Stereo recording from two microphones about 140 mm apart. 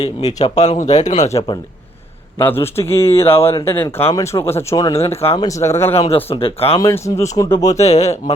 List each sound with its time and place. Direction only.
0.0 s speech: 25° left (ahead or behind)
0.3 s speech: 55° left (ahead or behind)
1.2 s a man's voice: 25° left (ahead or behind)
4.9 s speech: 45° left (ahead or behind)
5.4 s speech: 20° left (ahead or behind)
6.1 s speech: 45° left (ahead or behind)
6.7 s speech: 20° left (ahead or behind)
7.8 s speech: 50° left (ahead or behind)